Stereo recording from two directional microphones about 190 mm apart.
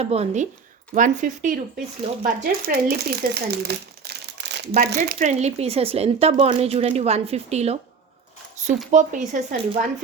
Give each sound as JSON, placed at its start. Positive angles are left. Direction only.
{"t": 0.0, "sound": "speech", "side_deg": -35}
{"t": 4.9, "sound": "speech", "side_deg": -40}
{"t": 8.9, "sound": "speech", "side_deg": -40}